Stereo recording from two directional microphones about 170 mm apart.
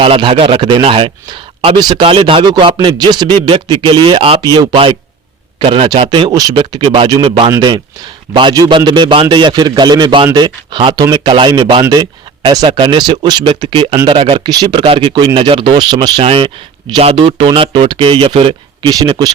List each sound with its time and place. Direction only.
0.0 s speech: 30° right (ahead or behind)